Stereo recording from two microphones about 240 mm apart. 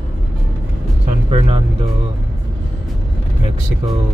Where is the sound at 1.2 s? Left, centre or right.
Right.